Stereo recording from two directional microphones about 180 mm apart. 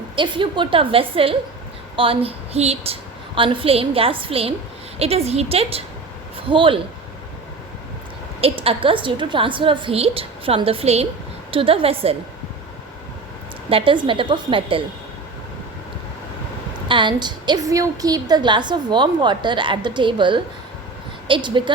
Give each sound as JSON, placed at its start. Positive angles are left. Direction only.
{"t": 0.2, "sound": "a woman's voice", "side_deg": -25}
{"t": 8.4, "sound": "a woman's voice", "side_deg": -30}
{"t": 13.7, "sound": "a woman's voice", "side_deg": -30}
{"t": 16.9, "sound": "a woman's voice", "side_deg": -25}